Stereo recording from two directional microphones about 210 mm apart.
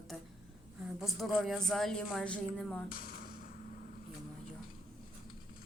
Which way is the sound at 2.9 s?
45° left (ahead or behind).